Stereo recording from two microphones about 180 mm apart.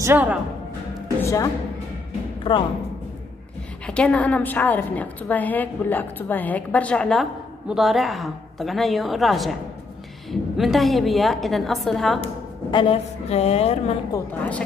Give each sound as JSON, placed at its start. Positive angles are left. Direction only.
{"t": 0.0, "sound": "speech", "side_deg": -10}
{"t": 1.2, "sound": "a woman's voice", "side_deg": 15}
{"t": 2.4, "sound": "speech", "side_deg": 30}
{"t": 3.8, "sound": "a woman's voice", "side_deg": 5}
{"t": 12.7, "sound": "a woman's voice", "side_deg": 30}
{"t": 14.1, "sound": "a woman's voice", "side_deg": 10}